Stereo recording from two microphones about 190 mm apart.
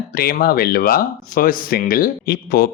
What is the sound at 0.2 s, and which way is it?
Speech, 50° left (ahead or behind).